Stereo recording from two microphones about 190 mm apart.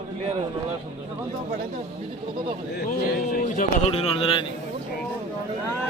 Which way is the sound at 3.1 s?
50° left (ahead or behind).